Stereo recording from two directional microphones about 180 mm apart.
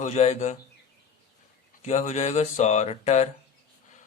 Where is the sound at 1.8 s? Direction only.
40° left (ahead or behind).